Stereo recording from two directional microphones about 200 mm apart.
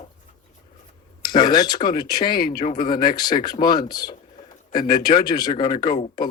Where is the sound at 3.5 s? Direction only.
45° left (ahead or behind).